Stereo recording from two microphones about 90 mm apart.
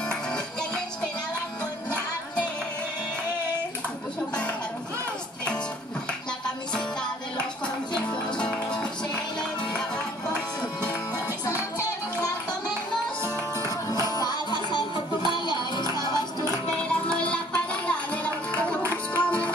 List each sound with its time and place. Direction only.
0.1 s music: 10° left (ahead or behind)
6.7 s music: 10° left (ahead or behind)
11.2 s music: 35° left (ahead or behind)
13.2 s music: 40° left (ahead or behind)
16.7 s music: 10° left (ahead or behind)